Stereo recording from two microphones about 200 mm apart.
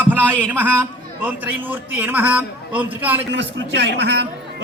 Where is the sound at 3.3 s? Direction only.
60° right (ahead or behind).